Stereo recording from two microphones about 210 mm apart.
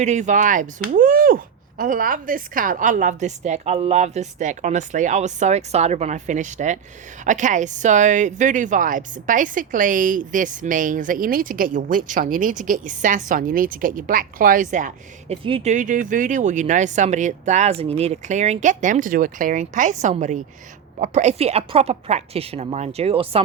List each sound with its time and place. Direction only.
0.0 s a woman's voice: 35° right (ahead or behind)